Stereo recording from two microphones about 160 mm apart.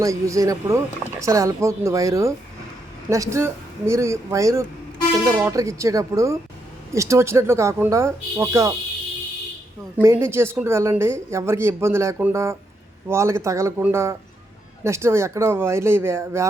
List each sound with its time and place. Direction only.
0.0 s speech: 20° right (ahead or behind)
10.0 s speech: 15° right (ahead or behind)